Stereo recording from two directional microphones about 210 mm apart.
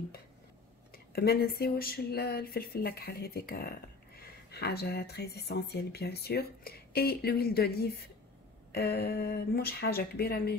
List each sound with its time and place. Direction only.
0.9 s speech: 50° left (ahead or behind)